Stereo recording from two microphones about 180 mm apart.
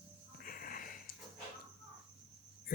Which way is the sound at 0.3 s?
50° left (ahead or behind).